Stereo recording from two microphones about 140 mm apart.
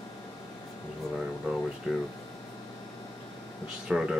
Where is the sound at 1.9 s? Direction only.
5° right (ahead or behind).